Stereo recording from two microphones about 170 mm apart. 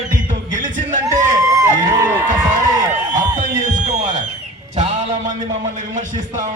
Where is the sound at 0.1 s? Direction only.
50° right (ahead or behind).